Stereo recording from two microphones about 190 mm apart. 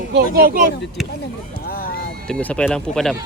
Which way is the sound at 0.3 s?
50° right (ahead or behind).